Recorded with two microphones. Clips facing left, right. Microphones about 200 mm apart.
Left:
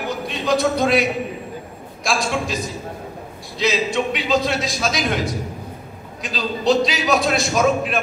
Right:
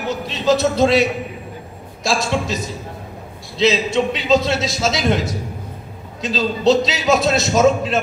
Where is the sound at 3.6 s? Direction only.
25° right (ahead or behind).